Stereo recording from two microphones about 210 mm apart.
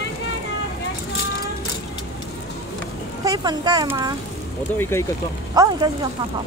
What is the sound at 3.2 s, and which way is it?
Speech, 20° right (ahead or behind).